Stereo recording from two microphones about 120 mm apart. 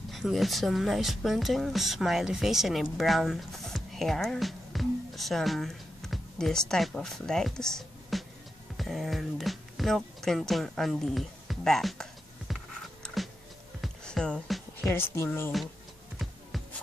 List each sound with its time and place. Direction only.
0.1 s speech: centre (ahead or behind)
13.0 s a sound: centre (ahead or behind)
13.7 s music: 5° left (ahead or behind)
14.9 s speech: 20° left (ahead or behind)
15.5 s speech: centre (ahead or behind)